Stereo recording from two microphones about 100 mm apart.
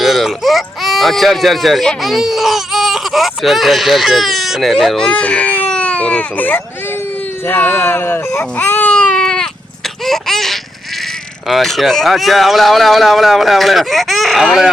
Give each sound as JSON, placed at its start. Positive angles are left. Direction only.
{"t": 0.0, "sound": "speech", "side_deg": 0}
{"t": 8.4, "sound": "baby cry", "side_deg": 20}
{"t": 10.0, "sound": "laughter", "side_deg": 0}
{"t": 11.4, "sound": "speech", "side_deg": 0}